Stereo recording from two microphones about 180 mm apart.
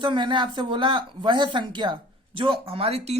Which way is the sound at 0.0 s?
25° right (ahead or behind).